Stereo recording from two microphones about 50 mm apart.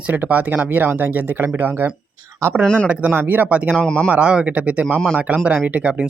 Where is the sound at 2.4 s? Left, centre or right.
Right.